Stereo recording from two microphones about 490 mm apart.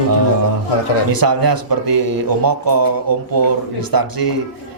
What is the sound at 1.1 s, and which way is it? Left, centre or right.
A man's voice, right.